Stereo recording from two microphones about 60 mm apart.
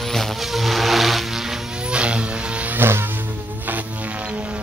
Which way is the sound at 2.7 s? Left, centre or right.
Right.